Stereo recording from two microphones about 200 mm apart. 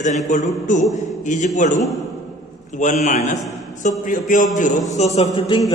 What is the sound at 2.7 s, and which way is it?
A man's voice, 35° left (ahead or behind).